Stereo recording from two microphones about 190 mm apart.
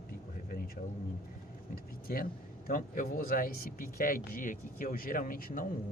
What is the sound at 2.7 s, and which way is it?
Speech, 50° left (ahead or behind).